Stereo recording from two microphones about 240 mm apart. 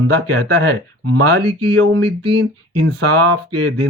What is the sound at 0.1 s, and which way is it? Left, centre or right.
Speech, right.